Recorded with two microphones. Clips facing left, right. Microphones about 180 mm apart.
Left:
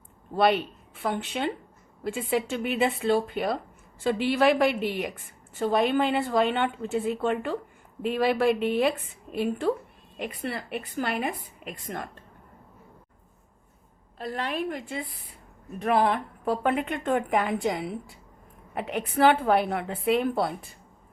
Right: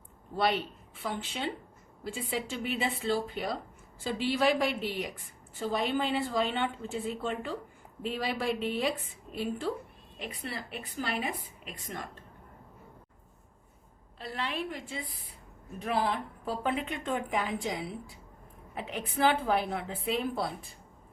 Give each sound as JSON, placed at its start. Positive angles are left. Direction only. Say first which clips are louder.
{"t": 0.3, "sound": "a woman's voice", "louder": "left 6 dB", "side_deg": 60}
{"t": 14.2, "sound": "a woman's voice", "louder": "left 5 dB", "side_deg": 50}